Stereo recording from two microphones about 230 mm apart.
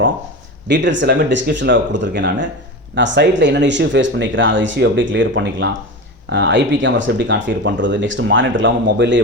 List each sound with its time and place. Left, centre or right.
0.7 s speech: right